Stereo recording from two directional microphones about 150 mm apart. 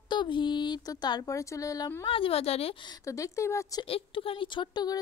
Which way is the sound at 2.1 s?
40° left (ahead or behind).